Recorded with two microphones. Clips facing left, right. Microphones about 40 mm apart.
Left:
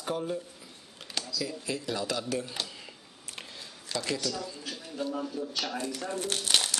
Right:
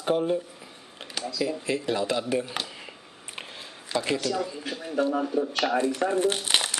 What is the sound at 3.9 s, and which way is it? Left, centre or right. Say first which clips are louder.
Speech: right 6 dB; right.